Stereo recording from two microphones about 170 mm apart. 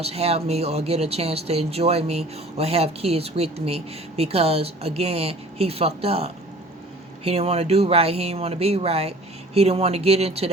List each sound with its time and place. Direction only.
0.0 s speech: 35° right (ahead or behind)